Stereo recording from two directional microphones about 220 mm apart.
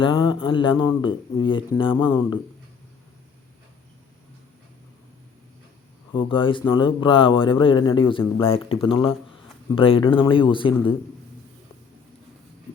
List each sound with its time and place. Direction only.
0.0 s speech: 20° left (ahead or behind)
6.1 s speech: 25° left (ahead or behind)